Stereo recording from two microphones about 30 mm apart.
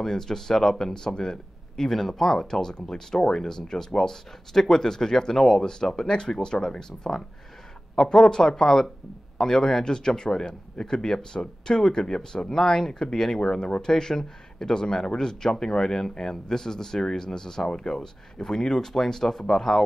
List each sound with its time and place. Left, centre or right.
0.0 s speech: centre
9.9 s speech: left